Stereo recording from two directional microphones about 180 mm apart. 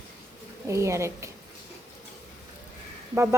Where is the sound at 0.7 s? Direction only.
15° right (ahead or behind).